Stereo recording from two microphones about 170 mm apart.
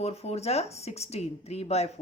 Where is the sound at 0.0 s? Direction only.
35° left (ahead or behind).